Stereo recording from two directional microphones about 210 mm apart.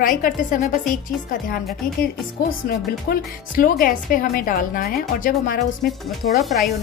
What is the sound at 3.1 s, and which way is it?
A woman's voice, 40° left (ahead or behind).